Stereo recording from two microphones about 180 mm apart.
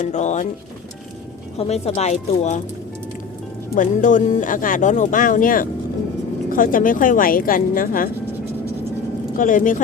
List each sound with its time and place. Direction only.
0.0 s speech: 40° left (ahead or behind)
1.5 s speech: 35° left (ahead or behind)
3.8 s speech: 45° left (ahead or behind)
9.4 s speech: 45° left (ahead or behind)